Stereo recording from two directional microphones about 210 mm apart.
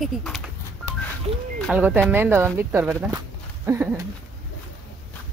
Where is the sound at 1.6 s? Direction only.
5° right (ahead or behind).